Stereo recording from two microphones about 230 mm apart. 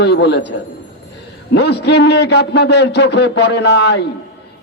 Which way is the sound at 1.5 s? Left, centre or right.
Left.